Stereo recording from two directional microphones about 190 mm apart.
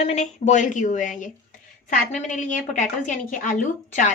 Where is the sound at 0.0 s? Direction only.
35° left (ahead or behind).